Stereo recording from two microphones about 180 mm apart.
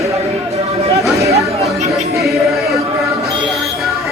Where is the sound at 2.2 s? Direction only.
Centre (ahead or behind).